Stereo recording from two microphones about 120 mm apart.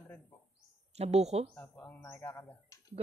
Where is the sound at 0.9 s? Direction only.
60° right (ahead or behind).